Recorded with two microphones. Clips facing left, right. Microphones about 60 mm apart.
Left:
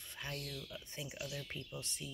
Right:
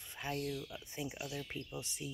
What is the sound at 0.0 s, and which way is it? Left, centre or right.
Speech, centre.